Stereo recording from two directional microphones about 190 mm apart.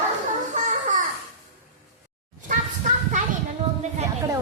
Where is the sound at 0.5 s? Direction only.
40° right (ahead or behind).